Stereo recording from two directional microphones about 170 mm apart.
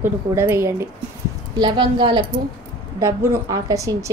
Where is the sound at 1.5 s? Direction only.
25° right (ahead or behind).